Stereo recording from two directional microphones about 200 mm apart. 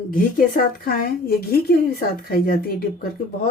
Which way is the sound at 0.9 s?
45° left (ahead or behind).